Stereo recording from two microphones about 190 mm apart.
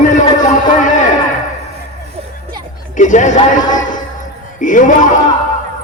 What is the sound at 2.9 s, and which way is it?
A man's voice, 40° left (ahead or behind).